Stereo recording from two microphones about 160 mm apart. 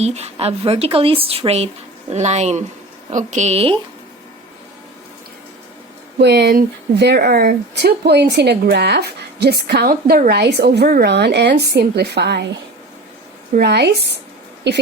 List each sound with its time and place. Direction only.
0.0 s a woman's voice: 40° right (ahead or behind)
6.1 s a woman's voice: 90° right
13.5 s a woman's voice: 85° right